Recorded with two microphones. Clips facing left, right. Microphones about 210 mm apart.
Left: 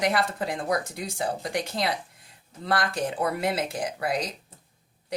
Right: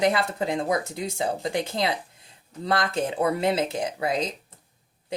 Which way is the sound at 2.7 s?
25° right (ahead or behind).